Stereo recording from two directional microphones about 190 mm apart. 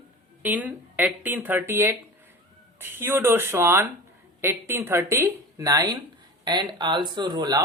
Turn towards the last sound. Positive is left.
turn(degrees=-20)  # may be behind; listen again after turning